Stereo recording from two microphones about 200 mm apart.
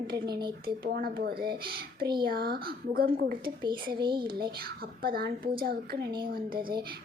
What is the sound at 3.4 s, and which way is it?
Music, 20° right (ahead or behind).